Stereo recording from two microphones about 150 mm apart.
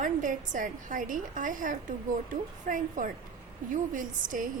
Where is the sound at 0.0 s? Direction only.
60° right (ahead or behind).